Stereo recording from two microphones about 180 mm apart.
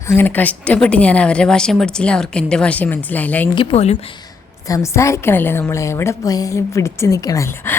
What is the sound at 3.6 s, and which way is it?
Speech, 35° left (ahead or behind).